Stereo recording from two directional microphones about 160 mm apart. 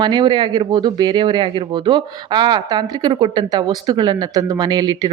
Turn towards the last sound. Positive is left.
turn(degrees=-25)  # may be behind; listen again after turning